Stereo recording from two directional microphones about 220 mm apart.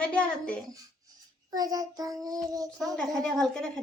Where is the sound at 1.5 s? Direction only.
15° right (ahead or behind).